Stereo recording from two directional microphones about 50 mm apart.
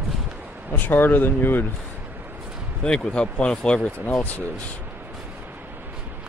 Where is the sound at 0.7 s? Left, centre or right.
Left.